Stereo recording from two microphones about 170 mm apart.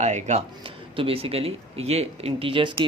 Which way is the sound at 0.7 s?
30° right (ahead or behind).